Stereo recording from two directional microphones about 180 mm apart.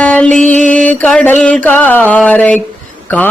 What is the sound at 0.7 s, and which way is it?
Mantra, 5° left (ahead or behind).